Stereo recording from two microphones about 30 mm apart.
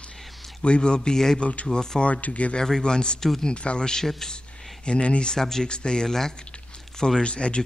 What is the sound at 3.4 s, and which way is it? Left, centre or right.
Speech, left.